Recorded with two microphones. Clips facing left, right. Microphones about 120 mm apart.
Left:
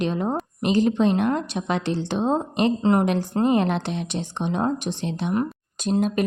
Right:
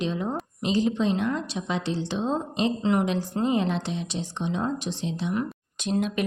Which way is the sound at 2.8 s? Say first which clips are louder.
Left 4 dB; 40° left (ahead or behind).